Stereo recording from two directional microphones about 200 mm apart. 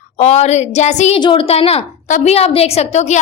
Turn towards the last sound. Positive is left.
turn(degrees=35)  # may be behind; listen again after turning